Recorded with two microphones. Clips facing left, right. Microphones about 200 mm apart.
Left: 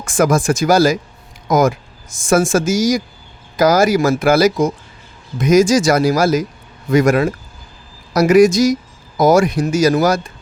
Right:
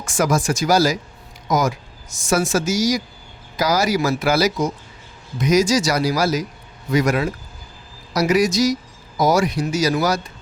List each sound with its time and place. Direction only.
0.0 s speech: 50° left (ahead or behind)